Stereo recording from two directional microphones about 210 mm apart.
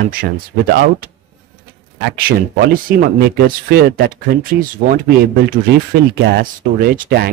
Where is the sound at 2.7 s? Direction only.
45° right (ahead or behind).